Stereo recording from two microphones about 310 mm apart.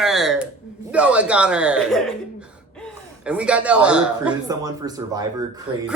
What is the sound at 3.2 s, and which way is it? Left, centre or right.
A woman's voice, centre.